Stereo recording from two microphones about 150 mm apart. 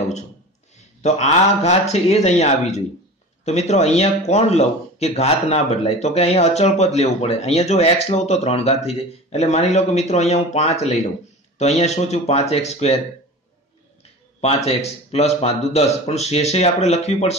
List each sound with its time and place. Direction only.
1.0 s speech: 45° left (ahead or behind)
14.4 s speech: 45° left (ahead or behind)